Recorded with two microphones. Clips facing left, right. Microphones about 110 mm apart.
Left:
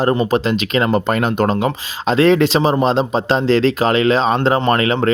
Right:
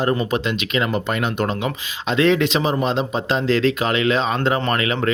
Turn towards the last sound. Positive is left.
turn(degrees=40)  # may be behind; listen again after turning